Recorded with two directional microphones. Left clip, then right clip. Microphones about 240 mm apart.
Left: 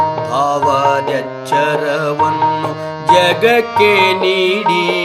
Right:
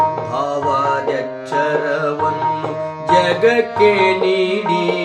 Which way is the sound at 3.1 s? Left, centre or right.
Left.